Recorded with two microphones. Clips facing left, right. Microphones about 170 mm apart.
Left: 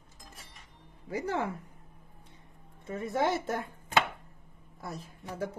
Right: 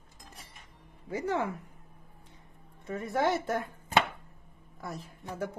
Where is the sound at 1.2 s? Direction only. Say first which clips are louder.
Right 2 dB; 30° left (ahead or behind).